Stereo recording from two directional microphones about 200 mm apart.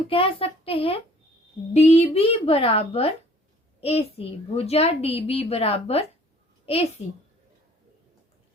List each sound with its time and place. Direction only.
0.1 s a child's voice: 25° left (ahead or behind)